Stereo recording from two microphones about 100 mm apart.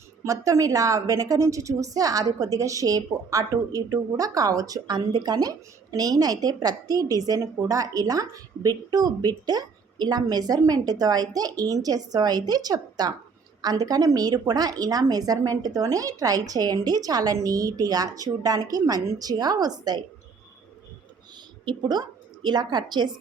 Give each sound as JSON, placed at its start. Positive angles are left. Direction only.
{"t": 0.3, "sound": "a woman's voice", "side_deg": -35}
{"t": 21.6, "sound": "a woman's voice", "side_deg": -45}